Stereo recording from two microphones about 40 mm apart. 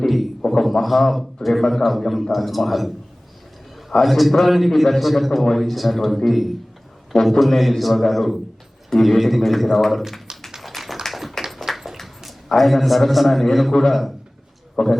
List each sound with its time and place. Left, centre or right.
0.0 s a sound: centre
0.6 s a man's voice: centre
10.6 s tap: centre
11.0 s a sound: centre
12.5 s a man's voice: centre
14.8 s a man's voice: centre